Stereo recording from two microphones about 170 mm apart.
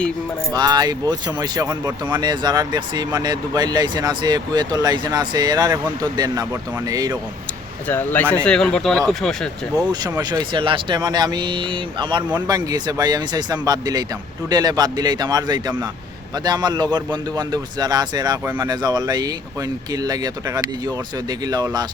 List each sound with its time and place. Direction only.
0.5 s speech: 25° right (ahead or behind)
7.9 s speech: 10° left (ahead or behind)
10.2 s speech: 25° right (ahead or behind)